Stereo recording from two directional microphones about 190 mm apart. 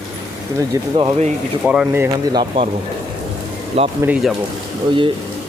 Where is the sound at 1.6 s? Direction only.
5° right (ahead or behind).